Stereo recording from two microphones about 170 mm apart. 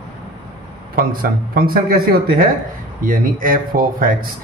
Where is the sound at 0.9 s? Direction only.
60° right (ahead or behind).